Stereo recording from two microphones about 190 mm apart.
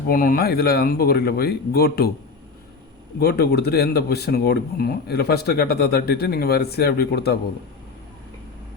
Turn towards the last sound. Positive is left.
turn(degrees=55)  # may be behind; listen again after turning